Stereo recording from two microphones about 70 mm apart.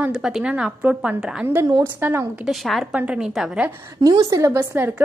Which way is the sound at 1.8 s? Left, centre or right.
Right.